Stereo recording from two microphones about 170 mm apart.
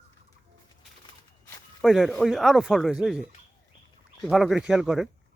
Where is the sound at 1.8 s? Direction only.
Centre (ahead or behind).